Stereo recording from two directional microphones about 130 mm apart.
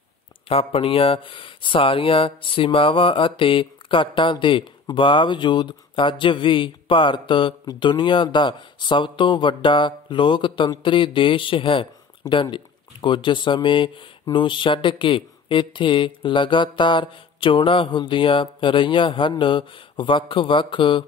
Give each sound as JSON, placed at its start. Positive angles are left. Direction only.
{"t": 0.5, "sound": "speech", "side_deg": 45}